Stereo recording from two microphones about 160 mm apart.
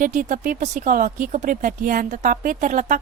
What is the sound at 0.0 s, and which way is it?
Speech, 55° right (ahead or behind).